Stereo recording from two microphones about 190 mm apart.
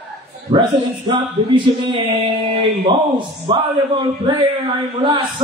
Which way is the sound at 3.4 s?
25° right (ahead or behind).